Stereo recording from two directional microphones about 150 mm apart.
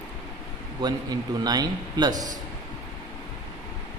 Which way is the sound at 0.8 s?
25° right (ahead or behind).